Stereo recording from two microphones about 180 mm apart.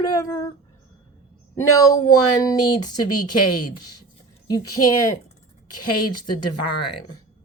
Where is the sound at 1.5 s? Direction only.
15° left (ahead or behind).